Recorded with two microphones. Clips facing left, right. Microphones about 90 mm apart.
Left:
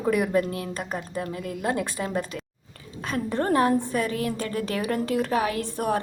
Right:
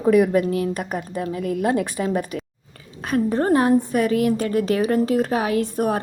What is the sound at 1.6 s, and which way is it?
Speech, 20° right (ahead or behind).